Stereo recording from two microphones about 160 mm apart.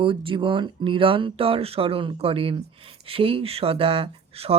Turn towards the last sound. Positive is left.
turn(degrees=-40)  # may be behind; listen again after turning